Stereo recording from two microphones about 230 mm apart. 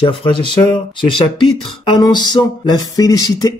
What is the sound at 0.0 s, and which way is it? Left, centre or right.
A man's voice, left.